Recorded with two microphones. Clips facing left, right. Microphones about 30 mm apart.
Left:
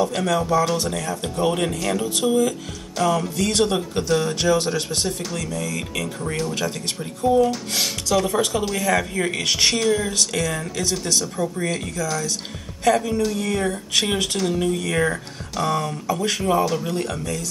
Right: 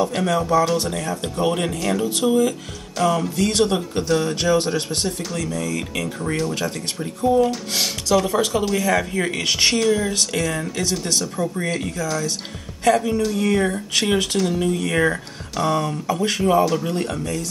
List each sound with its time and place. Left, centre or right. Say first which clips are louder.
0.0 s speech: right 1 dB; centre
0.7 s speech: right 1 dB; centre
1.8 s speech: right 1 dB; centre
10.1 s speech: right 1 dB; centre
11.5 s speech: right 1 dB; centre
13.4 s speech: right 4 dB; centre
16.9 s speech: right 1 dB; centre